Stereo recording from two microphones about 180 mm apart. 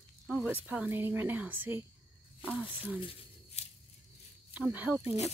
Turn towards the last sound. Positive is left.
turn(degrees=-15)  # may be behind; listen again after turning